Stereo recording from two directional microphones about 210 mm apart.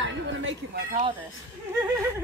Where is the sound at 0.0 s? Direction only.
65° right (ahead or behind).